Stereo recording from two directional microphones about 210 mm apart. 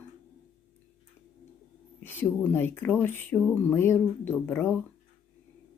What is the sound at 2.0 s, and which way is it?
Speech, 10° left (ahead or behind).